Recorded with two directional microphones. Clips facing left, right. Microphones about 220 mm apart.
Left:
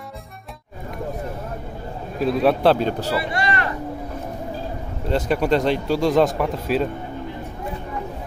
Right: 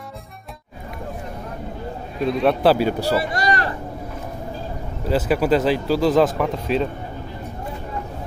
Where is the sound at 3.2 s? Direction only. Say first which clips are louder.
Right 2 dB; 40° right (ahead or behind).